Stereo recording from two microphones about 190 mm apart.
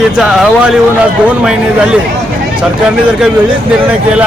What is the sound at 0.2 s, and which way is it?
Speech, centre (ahead or behind).